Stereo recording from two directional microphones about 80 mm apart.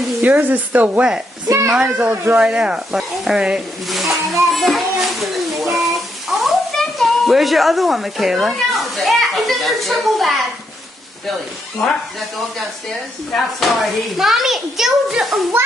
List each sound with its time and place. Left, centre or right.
0.2 s speech: centre
2.4 s a child's voice: centre
13.3 s a child's voice: centre